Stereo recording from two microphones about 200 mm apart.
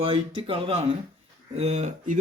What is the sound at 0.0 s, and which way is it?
Speech, 25° right (ahead or behind).